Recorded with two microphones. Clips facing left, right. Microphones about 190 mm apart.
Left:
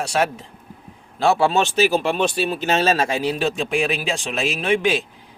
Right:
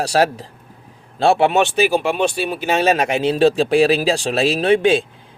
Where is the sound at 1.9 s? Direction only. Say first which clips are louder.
Right 2 dB; 10° right (ahead or behind); by 5.0 s 30° right (ahead or behind).